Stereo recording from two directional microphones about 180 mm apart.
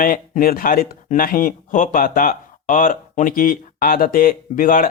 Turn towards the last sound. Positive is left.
turn(degrees=50)  # may be behind; listen again after turning